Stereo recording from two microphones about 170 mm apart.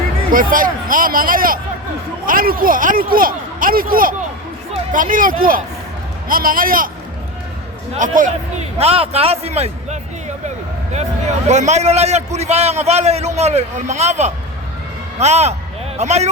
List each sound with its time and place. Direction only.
0.3 s a man's voice: 55° right (ahead or behind)
7.9 s a man's voice: 50° right (ahead or behind)
8.8 s a man's voice: 35° right (ahead or behind)